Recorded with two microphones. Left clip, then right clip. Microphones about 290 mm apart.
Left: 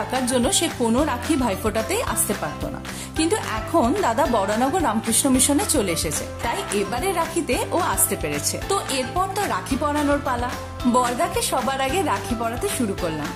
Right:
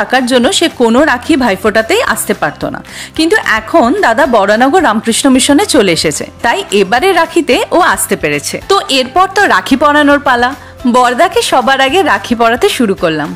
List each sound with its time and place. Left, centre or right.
0.1 s a woman's voice: left